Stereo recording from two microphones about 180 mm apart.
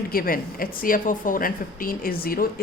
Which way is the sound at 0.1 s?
55° left (ahead or behind).